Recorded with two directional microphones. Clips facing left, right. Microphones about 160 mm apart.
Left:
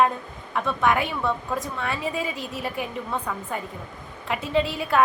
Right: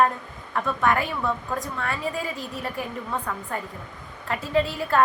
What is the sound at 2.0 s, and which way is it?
Speech, 25° left (ahead or behind).